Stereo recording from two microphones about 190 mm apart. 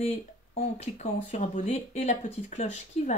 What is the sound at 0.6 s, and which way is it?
Speech, 40° left (ahead or behind).